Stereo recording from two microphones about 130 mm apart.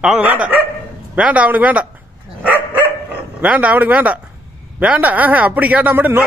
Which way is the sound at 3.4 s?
10° right (ahead or behind).